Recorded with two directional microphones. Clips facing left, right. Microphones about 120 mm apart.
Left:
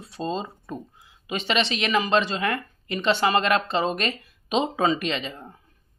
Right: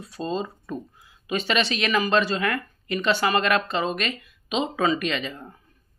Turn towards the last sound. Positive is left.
turn(degrees=25)  # may be behind; listen again after turning